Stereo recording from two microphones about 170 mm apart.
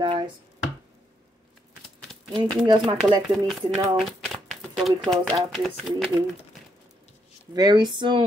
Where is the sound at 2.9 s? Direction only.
30° right (ahead or behind).